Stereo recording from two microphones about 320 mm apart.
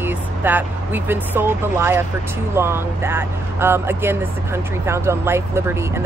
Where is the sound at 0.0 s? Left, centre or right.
Centre.